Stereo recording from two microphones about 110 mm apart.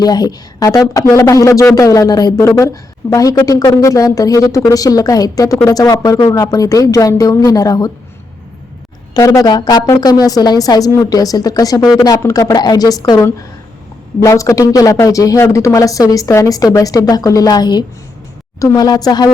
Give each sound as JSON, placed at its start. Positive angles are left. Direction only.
{"t": 0.0, "sound": "speech", "side_deg": 35}
{"t": 9.1, "sound": "speech", "side_deg": 35}